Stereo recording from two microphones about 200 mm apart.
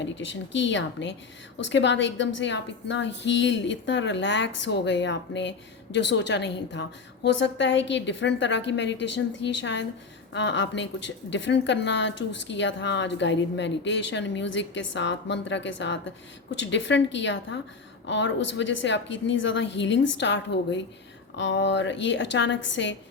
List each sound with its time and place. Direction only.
0.0 s a woman's voice: 65° left (ahead or behind)